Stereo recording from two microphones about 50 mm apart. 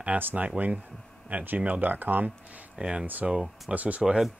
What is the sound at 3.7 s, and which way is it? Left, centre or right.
Speech, right.